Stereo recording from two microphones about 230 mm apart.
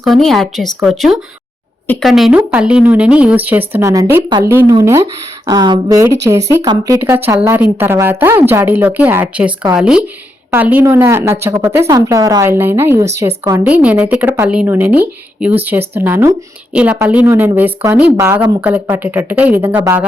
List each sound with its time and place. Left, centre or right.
0.0 s speech: centre